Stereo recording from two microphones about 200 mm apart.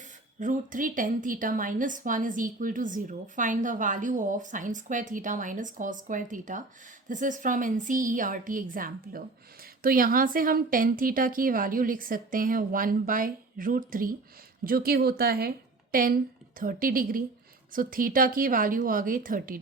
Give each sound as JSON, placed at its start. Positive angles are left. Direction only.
{"t": 0.3, "sound": "a woman's voice", "side_deg": -40}